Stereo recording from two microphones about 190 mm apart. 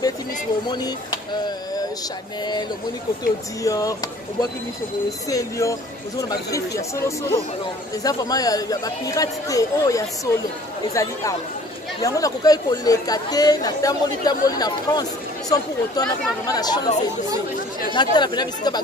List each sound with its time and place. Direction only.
0.7 s speech: 20° left (ahead or behind)
3.6 s speech: 20° left (ahead or behind)
5.3 s speech: 15° left (ahead or behind)
17.9 s speech: 25° left (ahead or behind)